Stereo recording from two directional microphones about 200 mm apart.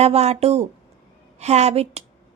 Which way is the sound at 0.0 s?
35° right (ahead or behind).